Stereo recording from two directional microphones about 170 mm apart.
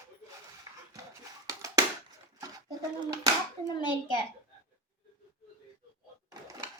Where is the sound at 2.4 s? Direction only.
20° right (ahead or behind).